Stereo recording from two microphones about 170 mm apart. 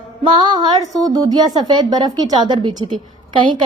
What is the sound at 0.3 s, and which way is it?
Speech, 25° right (ahead or behind).